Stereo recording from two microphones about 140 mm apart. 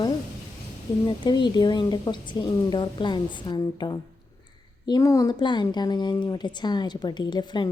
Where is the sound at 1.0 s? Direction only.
30° left (ahead or behind).